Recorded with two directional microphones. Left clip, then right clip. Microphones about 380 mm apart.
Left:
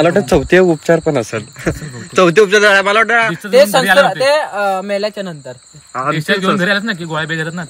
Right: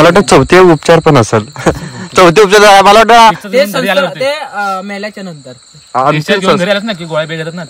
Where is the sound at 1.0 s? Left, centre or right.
Right.